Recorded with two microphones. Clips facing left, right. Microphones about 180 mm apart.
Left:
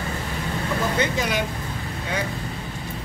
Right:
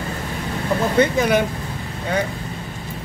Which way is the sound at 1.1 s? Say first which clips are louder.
Right 7 dB; 55° right (ahead or behind).